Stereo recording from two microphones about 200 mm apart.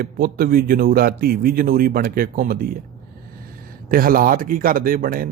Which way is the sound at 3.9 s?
45° right (ahead or behind).